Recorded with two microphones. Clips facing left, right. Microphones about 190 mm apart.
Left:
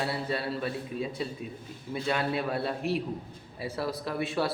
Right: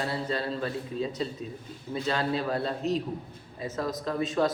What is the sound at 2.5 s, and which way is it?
Speech, 10° left (ahead or behind).